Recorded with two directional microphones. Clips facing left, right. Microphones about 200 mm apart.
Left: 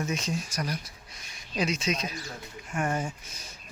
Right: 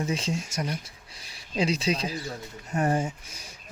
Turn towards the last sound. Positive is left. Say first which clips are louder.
# right 4 dB
turn(degrees=-35)  # may be behind; listen again after turning